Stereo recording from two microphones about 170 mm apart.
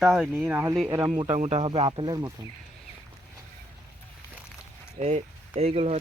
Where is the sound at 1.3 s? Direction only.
40° right (ahead or behind).